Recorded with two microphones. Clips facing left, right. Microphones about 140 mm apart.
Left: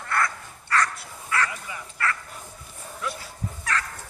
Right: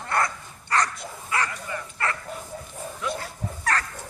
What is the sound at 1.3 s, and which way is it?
Bow-wow, 20° right (ahead or behind).